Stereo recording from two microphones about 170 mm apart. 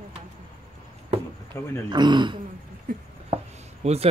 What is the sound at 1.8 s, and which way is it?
Speech, 25° right (ahead or behind).